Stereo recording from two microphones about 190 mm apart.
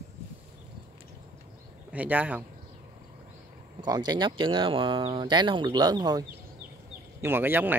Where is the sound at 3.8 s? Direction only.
20° right (ahead or behind).